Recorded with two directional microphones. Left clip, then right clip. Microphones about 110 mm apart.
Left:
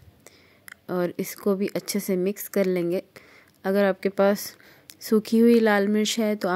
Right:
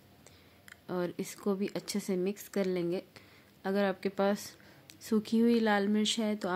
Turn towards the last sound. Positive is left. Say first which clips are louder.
# left 8 dB
turn(degrees=45)  # may be behind; listen again after turning